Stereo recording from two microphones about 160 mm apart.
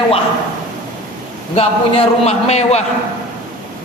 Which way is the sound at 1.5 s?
35° left (ahead or behind).